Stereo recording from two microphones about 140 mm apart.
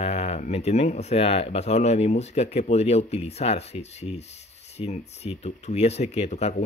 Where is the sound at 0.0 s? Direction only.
50° left (ahead or behind).